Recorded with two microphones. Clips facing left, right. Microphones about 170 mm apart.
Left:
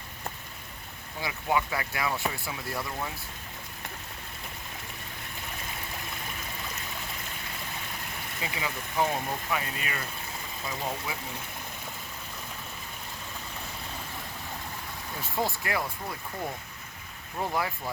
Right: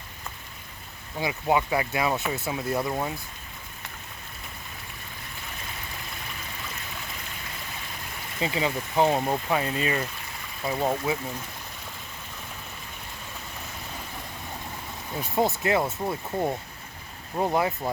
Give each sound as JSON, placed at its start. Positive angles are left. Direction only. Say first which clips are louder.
{"t": 1.2, "sound": "speech", "louder": "right 4 dB", "side_deg": -25}
{"t": 8.4, "sound": "speech", "louder": "right 9 dB", "side_deg": -25}
{"t": 15.2, "sound": "speech", "louder": "right 7 dB", "side_deg": -20}